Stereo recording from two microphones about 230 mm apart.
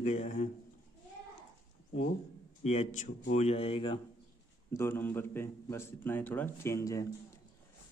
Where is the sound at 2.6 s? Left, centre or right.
Left.